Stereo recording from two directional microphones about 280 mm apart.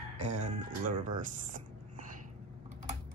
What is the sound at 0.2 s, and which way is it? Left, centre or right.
Speech, right.